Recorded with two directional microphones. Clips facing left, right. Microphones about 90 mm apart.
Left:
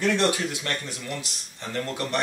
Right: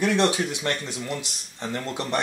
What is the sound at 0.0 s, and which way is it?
Speech, 20° right (ahead or behind).